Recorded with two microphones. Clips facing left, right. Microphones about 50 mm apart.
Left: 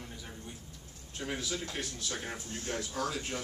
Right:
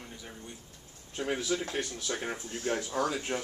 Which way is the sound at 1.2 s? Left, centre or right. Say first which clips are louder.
Right 5 dB; centre.